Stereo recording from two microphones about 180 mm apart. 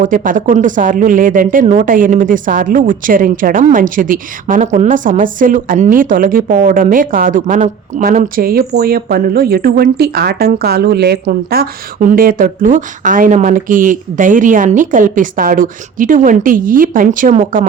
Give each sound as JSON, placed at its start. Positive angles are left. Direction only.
{"t": 0.0, "sound": "a woman's voice", "side_deg": -45}